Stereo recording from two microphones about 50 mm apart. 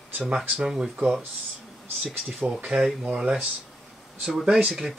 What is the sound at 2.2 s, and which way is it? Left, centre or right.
Speech, centre.